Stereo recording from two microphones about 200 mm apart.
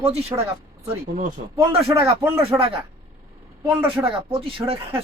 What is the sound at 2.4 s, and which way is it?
Speech, 30° right (ahead or behind).